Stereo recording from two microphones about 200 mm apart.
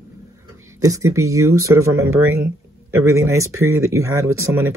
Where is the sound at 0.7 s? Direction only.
15° right (ahead or behind).